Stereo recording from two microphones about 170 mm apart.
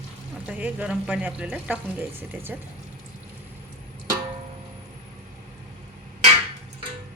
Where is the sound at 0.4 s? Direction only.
10° right (ahead or behind).